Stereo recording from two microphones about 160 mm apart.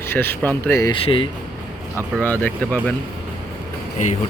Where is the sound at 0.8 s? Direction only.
35° left (ahead or behind).